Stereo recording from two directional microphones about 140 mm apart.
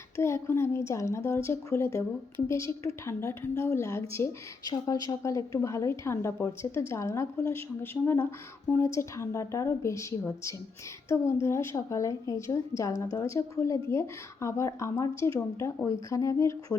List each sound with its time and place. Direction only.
0.2 s speech: 20° left (ahead or behind)